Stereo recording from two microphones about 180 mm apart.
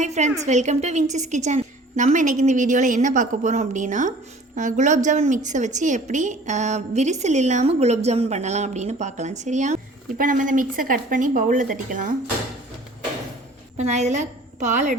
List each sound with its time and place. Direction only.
0.0 s a sound: 40° right (ahead or behind)
0.4 s a woman's voice: 40° right (ahead or behind)
13.7 s a woman's voice: 40° right (ahead or behind)